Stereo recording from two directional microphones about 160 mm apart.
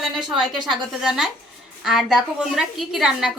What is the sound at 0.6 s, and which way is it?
A woman's voice, centre (ahead or behind).